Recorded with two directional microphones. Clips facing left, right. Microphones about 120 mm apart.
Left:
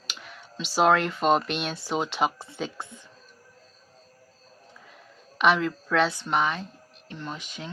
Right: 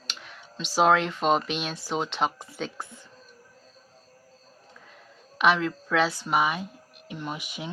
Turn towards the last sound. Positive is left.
turn(degrees=-15)  # may be behind; listen again after turning